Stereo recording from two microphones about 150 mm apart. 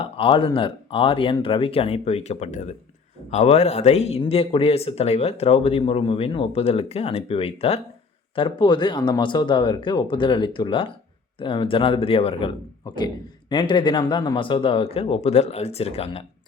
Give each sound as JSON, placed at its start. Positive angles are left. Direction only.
{"t": 0.0, "sound": "a man's voice", "side_deg": 35}